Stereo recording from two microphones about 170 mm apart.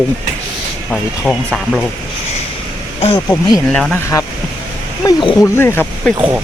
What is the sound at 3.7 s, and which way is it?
Speech, 5° left (ahead or behind).